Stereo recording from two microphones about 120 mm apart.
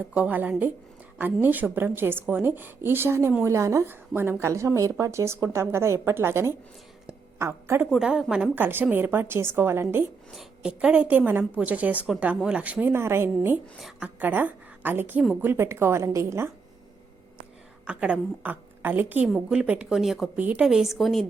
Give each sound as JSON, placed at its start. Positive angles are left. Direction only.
{"t": 0.0, "sound": "a woman's voice", "side_deg": -10}
{"t": 7.9, "sound": "a woman's voice", "side_deg": -5}
{"t": 10.3, "sound": "a woman's voice", "side_deg": -5}
{"t": 13.7, "sound": "speech", "side_deg": 0}
{"t": 14.2, "sound": "a woman's voice", "side_deg": -15}
{"t": 17.8, "sound": "a woman's voice", "side_deg": -10}